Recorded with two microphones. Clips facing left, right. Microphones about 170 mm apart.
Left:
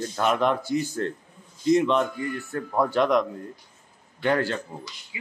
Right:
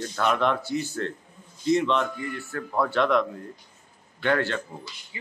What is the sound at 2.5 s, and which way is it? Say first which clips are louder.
Speech: left 2 dB; 25° left (ahead or behind).